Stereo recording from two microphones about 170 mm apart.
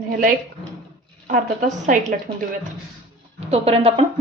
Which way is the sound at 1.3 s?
50° right (ahead or behind).